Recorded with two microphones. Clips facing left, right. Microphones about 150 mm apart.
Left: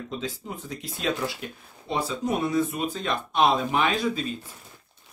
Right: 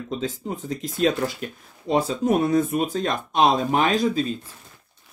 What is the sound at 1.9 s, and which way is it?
Speech, 45° right (ahead or behind).